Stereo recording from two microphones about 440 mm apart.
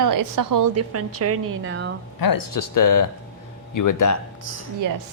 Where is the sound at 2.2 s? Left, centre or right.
Left.